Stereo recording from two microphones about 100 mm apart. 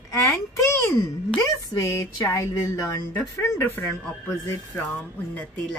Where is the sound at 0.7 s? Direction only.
25° left (ahead or behind).